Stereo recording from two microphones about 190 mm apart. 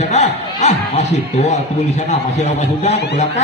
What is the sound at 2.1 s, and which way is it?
A man's voice, 35° left (ahead or behind).